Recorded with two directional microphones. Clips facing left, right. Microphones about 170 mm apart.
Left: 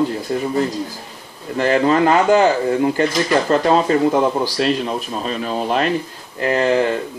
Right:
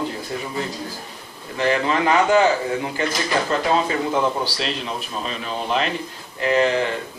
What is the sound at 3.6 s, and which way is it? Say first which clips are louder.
Speech: left 6 dB; 45° left (ahead or behind).